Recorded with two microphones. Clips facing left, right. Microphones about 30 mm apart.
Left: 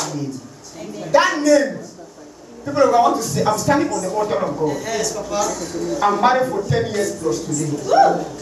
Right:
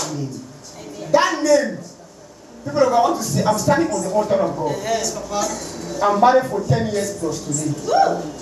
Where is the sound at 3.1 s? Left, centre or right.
Centre.